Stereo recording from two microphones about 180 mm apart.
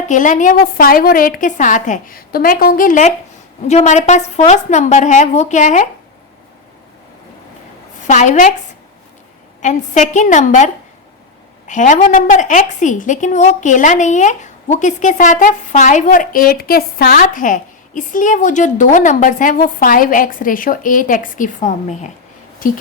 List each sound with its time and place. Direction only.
0.1 s a woman's voice: 45° left (ahead or behind)
8.0 s a woman's voice: 40° left (ahead or behind)
9.6 s a woman's voice: 45° left (ahead or behind)
11.7 s a woman's voice: 45° left (ahead or behind)